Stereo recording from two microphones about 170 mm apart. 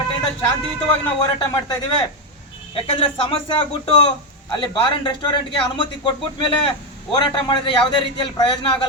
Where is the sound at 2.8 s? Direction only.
35° left (ahead or behind).